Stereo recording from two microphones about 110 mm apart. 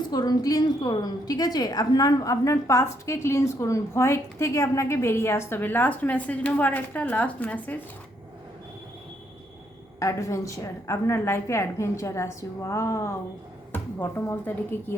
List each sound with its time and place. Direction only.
0.1 s a woman's voice: 35° left (ahead or behind); by 7.8 s 15° left (ahead or behind)
10.0 s a woman's voice: 30° left (ahead or behind)